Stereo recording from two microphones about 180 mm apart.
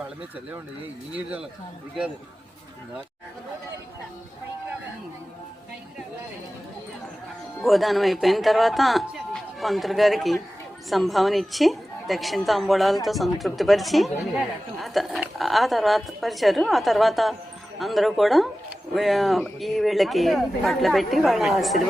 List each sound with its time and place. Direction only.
1.1 s speech: 5° right (ahead or behind)
7.6 s a man's voice: centre (ahead or behind)